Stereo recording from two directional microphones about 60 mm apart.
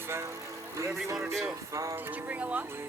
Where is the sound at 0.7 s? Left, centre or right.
Right.